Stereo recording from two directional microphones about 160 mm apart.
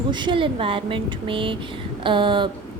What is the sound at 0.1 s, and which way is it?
A woman's voice, 30° right (ahead or behind).